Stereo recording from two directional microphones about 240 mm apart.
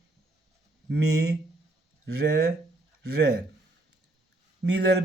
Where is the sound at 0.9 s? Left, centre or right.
Right.